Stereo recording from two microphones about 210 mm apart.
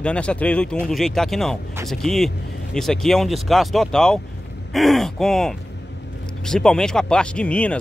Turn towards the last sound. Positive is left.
turn(degrees=5)  # may be behind; listen again after turning